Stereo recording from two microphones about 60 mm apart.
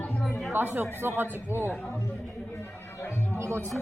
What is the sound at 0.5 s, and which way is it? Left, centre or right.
Speech, right.